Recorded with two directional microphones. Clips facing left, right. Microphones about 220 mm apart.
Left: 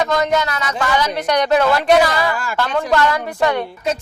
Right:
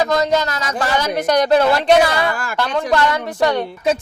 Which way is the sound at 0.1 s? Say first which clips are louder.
Right 1 dB; 35° right (ahead or behind).